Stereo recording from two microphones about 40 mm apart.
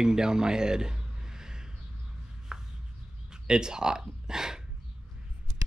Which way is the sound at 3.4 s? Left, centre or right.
Centre.